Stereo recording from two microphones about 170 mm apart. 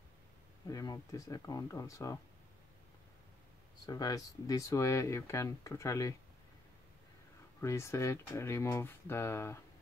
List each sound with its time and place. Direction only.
0.7 s speech: 20° left (ahead or behind)
3.8 s speech: 20° left (ahead or behind)
7.6 s speech: 15° left (ahead or behind)